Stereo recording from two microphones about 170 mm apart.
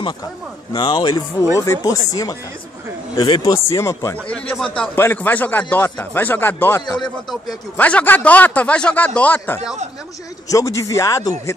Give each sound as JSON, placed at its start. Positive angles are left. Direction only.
{"t": 0.7, "sound": "speech", "side_deg": 25}
{"t": 3.5, "sound": "a man's voice", "side_deg": 15}
{"t": 4.3, "sound": "a man's voice", "side_deg": 5}